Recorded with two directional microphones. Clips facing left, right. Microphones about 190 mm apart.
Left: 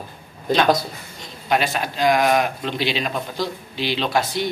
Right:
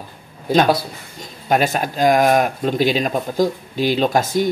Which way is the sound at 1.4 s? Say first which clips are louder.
Right 4 dB; 45° right (ahead or behind).